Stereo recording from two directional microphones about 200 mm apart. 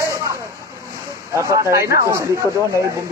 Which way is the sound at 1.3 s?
15° right (ahead or behind).